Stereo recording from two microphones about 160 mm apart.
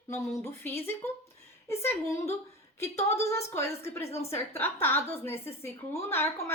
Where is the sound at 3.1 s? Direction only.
15° left (ahead or behind).